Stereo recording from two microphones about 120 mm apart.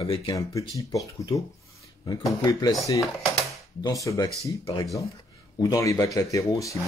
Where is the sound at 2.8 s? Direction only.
25° left (ahead or behind).